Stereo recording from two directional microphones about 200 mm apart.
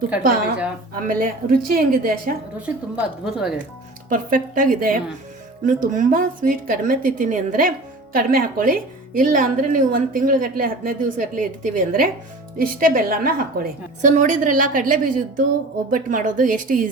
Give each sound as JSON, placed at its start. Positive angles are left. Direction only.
{"t": 1.0, "sound": "a woman's voice", "side_deg": -45}
{"t": 2.6, "sound": "a woman's voice", "side_deg": -5}
{"t": 4.1, "sound": "a woman's voice", "side_deg": -40}